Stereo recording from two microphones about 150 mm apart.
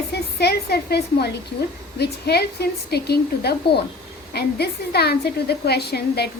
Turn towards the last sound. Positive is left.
turn(degrees=90)